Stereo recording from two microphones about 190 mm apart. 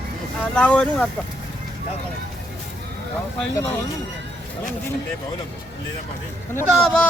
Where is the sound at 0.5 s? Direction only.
5° left (ahead or behind).